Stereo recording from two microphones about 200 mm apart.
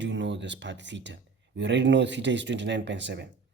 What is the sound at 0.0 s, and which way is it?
A man's voice, 65° right (ahead or behind).